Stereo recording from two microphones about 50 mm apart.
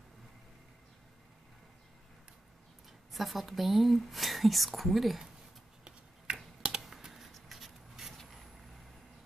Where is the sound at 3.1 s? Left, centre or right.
Centre.